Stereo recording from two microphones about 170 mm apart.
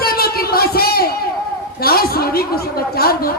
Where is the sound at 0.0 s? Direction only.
65° left (ahead or behind).